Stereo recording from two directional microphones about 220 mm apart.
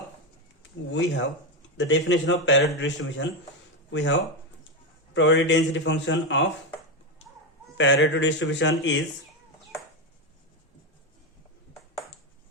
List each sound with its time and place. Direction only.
1.8 s a man's voice: 55° left (ahead or behind)
7.8 s a man's voice: 55° left (ahead or behind)